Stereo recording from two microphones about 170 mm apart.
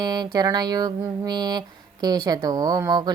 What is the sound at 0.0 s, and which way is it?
A woman's voice, 25° right (ahead or behind).